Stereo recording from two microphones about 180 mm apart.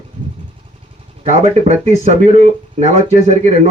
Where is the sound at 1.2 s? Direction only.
40° right (ahead or behind).